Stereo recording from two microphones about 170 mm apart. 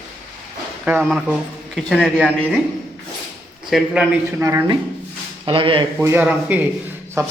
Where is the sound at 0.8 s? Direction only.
10° right (ahead or behind).